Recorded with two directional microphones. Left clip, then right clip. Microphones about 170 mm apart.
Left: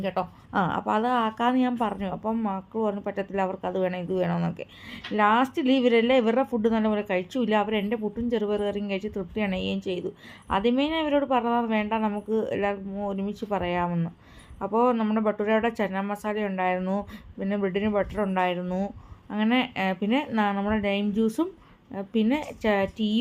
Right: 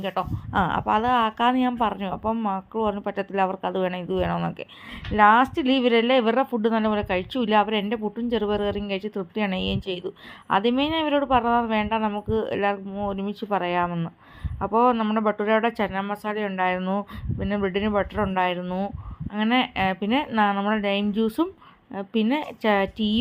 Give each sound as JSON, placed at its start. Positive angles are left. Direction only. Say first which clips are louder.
{"t": 0.0, "sound": "speech", "louder": "right 1 dB", "side_deg": -15}